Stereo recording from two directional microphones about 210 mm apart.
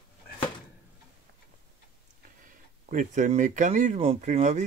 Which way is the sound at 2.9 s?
35° right (ahead or behind).